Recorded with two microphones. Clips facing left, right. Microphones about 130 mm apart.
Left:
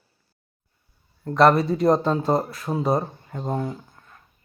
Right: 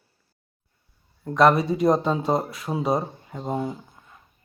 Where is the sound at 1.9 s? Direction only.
5° right (ahead or behind).